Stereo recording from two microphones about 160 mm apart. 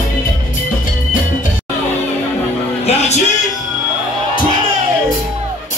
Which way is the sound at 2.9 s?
45° left (ahead or behind).